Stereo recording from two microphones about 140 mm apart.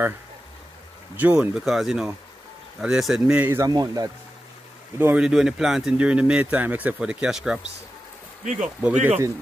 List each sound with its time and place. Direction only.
1.1 s speech: 10° right (ahead or behind)
3.4 s speech: 25° right (ahead or behind)
4.9 s speech: 15° right (ahead or behind)
5.2 s speech: 5° right (ahead or behind)